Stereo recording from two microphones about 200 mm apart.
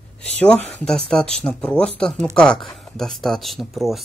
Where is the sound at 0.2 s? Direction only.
5° left (ahead or behind).